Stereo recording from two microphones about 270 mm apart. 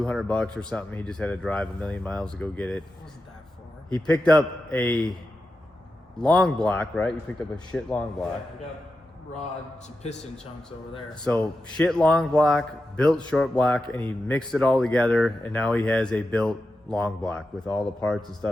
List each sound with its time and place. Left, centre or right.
0.0 s speech: centre
3.8 s speech: centre
6.1 s speech: centre
10.0 s a man's voice: left
11.1 s speech: centre